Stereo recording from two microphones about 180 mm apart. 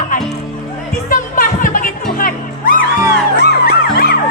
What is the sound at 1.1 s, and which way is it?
Music, 50° left (ahead or behind).